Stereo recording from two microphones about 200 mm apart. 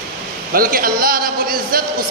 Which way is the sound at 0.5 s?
45° right (ahead or behind).